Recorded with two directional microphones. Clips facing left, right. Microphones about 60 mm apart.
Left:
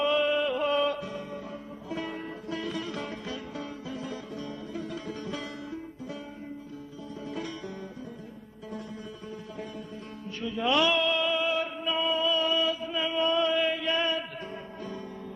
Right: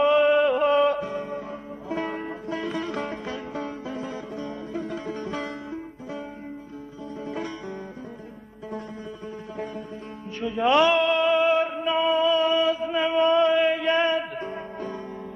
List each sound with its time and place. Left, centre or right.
0.0 s music: right
7.2 s music: right
10.4 s music: right